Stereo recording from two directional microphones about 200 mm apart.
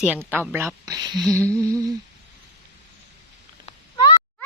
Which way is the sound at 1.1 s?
5° left (ahead or behind).